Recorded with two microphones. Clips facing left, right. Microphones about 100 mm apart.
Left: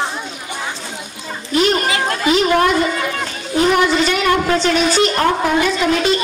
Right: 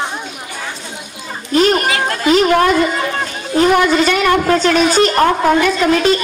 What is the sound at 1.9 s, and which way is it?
Speech, 40° right (ahead or behind).